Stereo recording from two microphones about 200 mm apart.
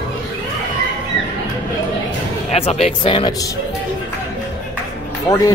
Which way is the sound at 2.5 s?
30° left (ahead or behind).